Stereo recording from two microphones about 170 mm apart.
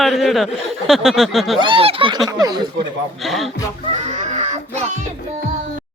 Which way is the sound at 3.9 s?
40° right (ahead or behind).